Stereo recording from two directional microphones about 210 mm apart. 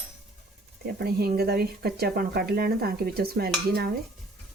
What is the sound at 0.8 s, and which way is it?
Speech, 50° right (ahead or behind).